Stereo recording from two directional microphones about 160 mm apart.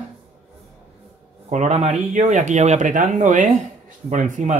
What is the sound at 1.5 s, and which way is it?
Speech, 45° right (ahead or behind).